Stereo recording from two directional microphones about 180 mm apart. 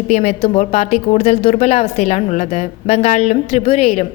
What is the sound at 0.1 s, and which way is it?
A woman's voice, 35° left (ahead or behind).